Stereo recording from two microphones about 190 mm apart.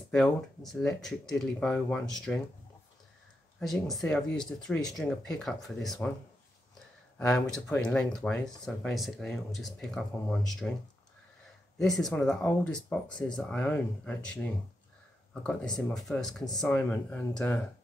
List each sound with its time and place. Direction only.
0.1 s speech: centre (ahead or behind)
3.5 s speech: centre (ahead or behind)
7.2 s speech: 5° left (ahead or behind)
11.8 s speech: centre (ahead or behind)